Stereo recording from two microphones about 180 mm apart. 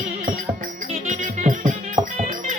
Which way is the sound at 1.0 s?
45° right (ahead or behind).